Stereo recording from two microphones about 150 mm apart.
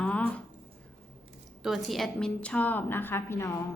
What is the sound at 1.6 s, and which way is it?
A woman's voice, centre (ahead or behind).